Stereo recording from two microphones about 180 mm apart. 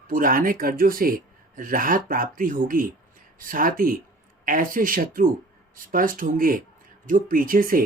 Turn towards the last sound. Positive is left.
turn(degrees=-50)  # may be behind; listen again after turning